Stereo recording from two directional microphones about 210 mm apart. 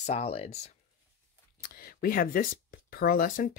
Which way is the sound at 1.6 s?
45° left (ahead or behind).